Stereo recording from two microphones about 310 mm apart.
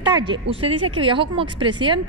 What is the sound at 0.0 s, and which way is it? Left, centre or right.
A woman's voice, centre.